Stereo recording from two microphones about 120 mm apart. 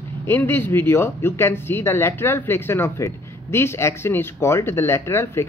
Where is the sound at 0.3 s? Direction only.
20° left (ahead or behind).